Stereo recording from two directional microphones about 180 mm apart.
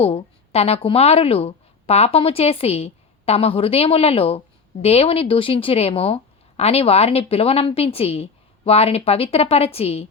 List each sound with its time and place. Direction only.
0.0 s a woman's voice: 35° left (ahead or behind)